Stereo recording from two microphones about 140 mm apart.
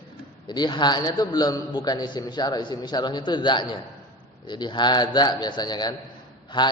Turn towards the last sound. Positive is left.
turn(degrees=35)  # may be behind; listen again after turning